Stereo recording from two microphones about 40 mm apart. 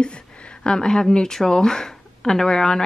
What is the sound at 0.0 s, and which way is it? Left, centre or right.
A woman's voice, left.